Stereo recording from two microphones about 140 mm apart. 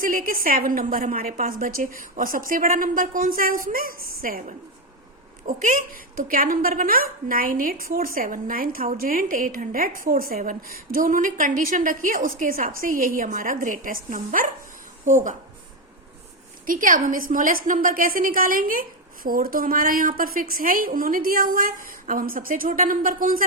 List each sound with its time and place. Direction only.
0.0 s a woman's voice: 80° right
5.5 s a woman's voice: 70° right (ahead or behind)
16.6 s a woman's voice: 75° right (ahead or behind)